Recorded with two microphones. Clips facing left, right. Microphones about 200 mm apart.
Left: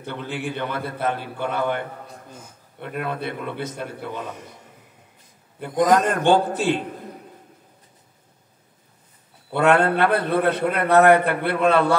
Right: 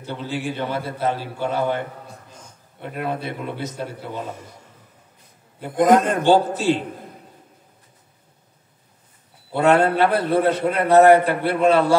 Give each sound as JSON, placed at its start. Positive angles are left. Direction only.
{"t": 0.0, "sound": "a man's voice", "side_deg": 60}
{"t": 2.8, "sound": "a man's voice", "side_deg": -20}
{"t": 3.2, "sound": "a man's voice", "side_deg": 55}
{"t": 5.8, "sound": "speech", "side_deg": -55}
{"t": 6.2, "sound": "a man's voice", "side_deg": 55}
{"t": 9.5, "sound": "a man's voice", "side_deg": 55}